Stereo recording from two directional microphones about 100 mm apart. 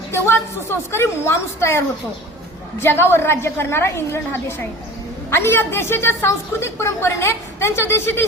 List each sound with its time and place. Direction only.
0.1 s a woman's voice: 25° left (ahead or behind)
2.8 s a woman's voice: 25° left (ahead or behind)